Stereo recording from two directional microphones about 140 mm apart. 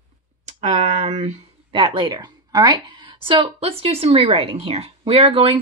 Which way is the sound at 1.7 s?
40° right (ahead or behind).